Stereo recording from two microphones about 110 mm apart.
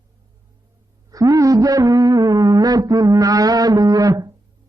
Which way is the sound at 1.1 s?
30° right (ahead or behind).